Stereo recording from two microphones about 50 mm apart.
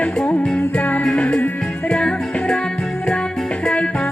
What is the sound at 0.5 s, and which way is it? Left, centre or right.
Music, left.